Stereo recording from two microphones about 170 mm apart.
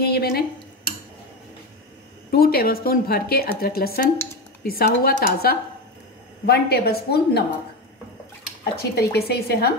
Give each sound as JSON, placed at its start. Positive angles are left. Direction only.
{"t": 0.0, "sound": "speech", "side_deg": 70}
{"t": 2.3, "sound": "a woman's voice", "side_deg": 60}
{"t": 8.7, "sound": "a woman's voice", "side_deg": 70}